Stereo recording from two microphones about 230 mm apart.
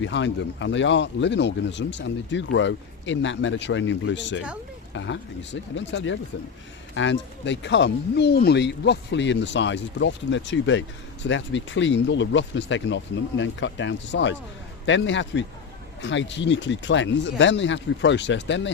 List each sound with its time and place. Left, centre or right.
0.0 s speech: left